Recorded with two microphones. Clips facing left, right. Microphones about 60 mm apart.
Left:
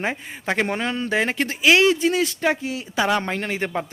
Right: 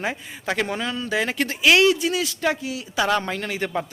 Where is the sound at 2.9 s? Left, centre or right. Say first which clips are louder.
Even; centre.